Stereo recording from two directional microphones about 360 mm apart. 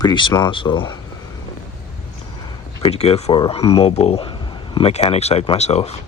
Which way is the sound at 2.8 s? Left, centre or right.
Centre.